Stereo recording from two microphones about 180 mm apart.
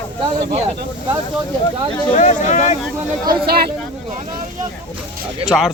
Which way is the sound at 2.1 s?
40° left (ahead or behind).